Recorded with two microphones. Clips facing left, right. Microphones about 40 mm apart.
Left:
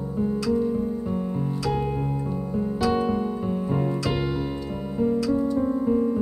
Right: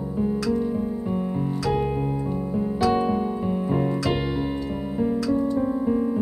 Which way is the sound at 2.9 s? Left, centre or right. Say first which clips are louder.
Right 1 dB; centre.